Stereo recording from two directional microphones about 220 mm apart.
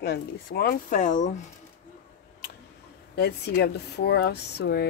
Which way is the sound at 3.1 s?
45° left (ahead or behind).